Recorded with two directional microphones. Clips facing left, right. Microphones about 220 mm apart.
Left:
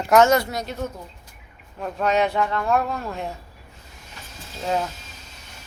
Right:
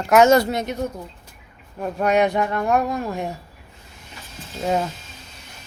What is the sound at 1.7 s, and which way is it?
Speech, 10° right (ahead or behind).